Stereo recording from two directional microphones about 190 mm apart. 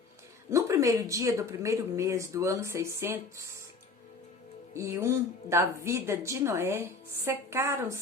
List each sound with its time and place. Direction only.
0.5 s speech: 15° right (ahead or behind)
4.7 s speech: 15° right (ahead or behind)